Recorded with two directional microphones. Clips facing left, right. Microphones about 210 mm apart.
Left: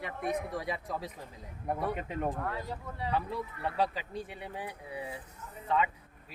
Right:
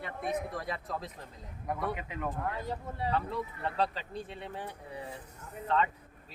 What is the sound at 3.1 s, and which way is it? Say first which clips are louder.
Speech: left 1 dB; 10° left (ahead or behind).